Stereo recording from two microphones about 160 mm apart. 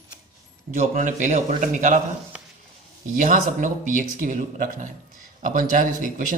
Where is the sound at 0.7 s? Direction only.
55° right (ahead or behind).